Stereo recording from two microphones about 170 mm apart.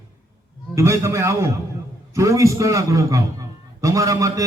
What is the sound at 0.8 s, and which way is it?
A man's voice, 15° right (ahead or behind).